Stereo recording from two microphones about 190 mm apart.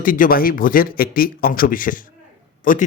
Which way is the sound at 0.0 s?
45° left (ahead or behind).